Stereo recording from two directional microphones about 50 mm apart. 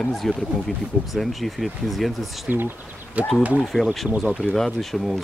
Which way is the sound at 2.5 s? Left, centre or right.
Right.